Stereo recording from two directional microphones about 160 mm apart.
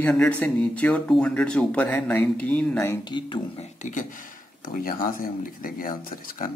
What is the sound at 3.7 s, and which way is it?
Speech, 50° left (ahead or behind).